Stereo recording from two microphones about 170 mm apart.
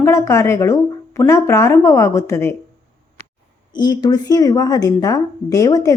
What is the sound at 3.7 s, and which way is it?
A woman's voice, 25° left (ahead or behind).